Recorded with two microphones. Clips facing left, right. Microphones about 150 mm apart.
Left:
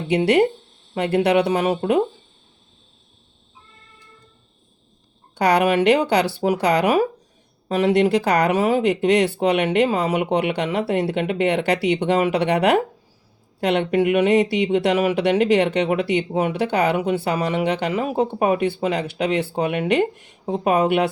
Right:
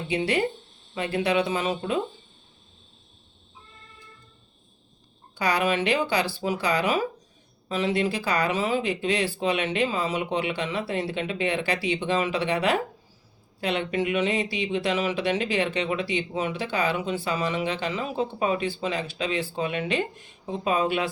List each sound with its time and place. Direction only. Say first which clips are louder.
0.1 s speech: left 9 dB; 65° left (ahead or behind)
5.3 s speech: left 7 dB; 70° left (ahead or behind)